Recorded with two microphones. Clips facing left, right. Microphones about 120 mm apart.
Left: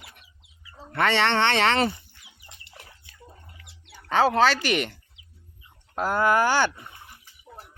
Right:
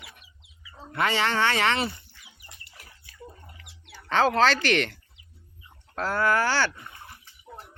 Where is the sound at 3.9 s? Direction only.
10° left (ahead or behind).